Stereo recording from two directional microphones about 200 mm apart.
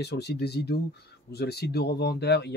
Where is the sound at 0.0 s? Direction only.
55° left (ahead or behind).